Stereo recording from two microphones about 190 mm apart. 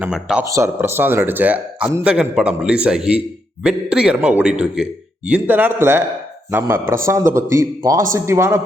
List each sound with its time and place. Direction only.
0.0 s a man's voice: 5° right (ahead or behind)